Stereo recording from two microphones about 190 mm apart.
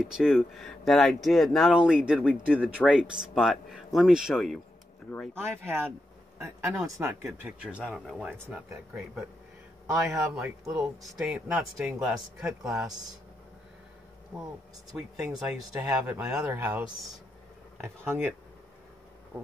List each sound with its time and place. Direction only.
0.0 s speech: 5° right (ahead or behind)
9.8 s speech: 15° right (ahead or behind)
10.7 s speech: centre (ahead or behind)
15.0 s speech: 5° right (ahead or behind)